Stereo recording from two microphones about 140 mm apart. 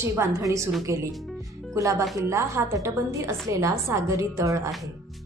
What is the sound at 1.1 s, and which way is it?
Speech, centre (ahead or behind).